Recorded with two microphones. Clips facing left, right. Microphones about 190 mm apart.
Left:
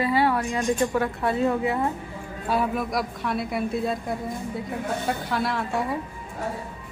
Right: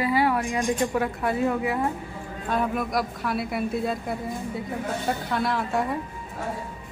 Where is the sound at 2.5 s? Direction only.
Centre (ahead or behind).